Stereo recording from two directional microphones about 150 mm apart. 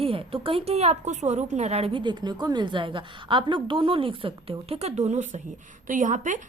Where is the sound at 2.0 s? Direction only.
30° right (ahead or behind).